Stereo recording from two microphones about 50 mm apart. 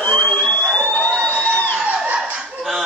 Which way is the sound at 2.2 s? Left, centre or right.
Centre.